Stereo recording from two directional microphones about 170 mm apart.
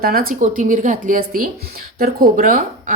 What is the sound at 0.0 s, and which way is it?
A woman's voice, 60° right (ahead or behind).